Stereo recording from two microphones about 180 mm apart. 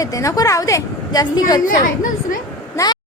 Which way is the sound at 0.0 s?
20° left (ahead or behind).